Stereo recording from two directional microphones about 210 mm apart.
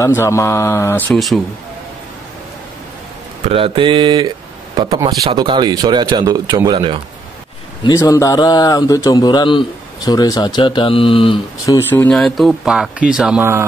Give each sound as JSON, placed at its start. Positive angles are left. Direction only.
{"t": 0.0, "sound": "speech", "side_deg": 15}
{"t": 3.4, "sound": "speech", "side_deg": -25}
{"t": 7.8, "sound": "speech", "side_deg": 15}